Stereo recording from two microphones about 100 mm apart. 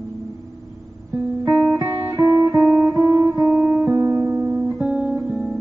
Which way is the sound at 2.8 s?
35° right (ahead or behind).